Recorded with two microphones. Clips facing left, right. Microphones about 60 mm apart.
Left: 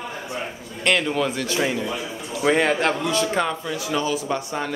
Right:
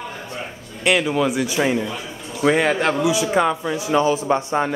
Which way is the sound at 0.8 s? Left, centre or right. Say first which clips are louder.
Right 3 dB; centre.